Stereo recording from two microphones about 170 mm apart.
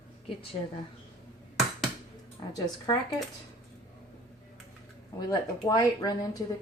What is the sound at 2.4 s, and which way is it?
Speech, 20° left (ahead or behind).